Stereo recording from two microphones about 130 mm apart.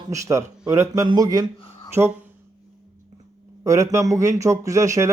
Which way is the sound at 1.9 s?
15° right (ahead or behind).